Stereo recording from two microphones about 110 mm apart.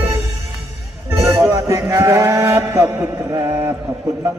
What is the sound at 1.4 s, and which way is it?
Music, 30° right (ahead or behind).